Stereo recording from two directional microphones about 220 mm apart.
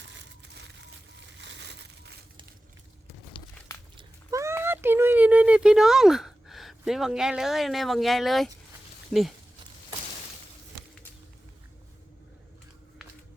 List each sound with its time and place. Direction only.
0.1 s crushing: 50° right (ahead or behind)
3.9 s a sound: 15° right (ahead or behind)
9.1 s speech: centre (ahead or behind)